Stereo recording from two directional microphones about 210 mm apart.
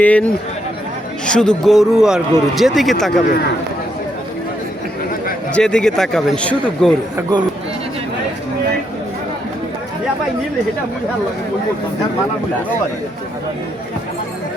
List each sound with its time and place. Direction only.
0.0 s speech: 5° left (ahead or behind)
5.5 s speech: 5° left (ahead or behind)
7.2 s speech: 20° right (ahead or behind)